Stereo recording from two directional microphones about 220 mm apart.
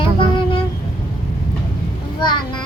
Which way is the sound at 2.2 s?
20° left (ahead or behind).